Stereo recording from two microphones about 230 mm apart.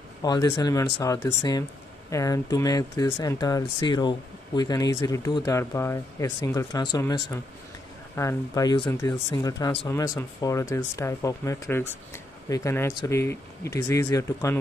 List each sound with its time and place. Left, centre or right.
0.2 s speech: centre